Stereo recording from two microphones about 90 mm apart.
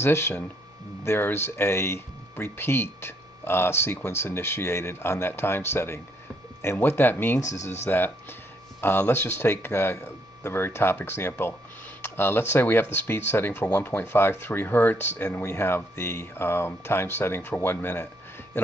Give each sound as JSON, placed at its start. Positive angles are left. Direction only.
{"t": 0.0, "sound": "speech", "side_deg": 25}
{"t": 7.3, "sound": "speech", "side_deg": 35}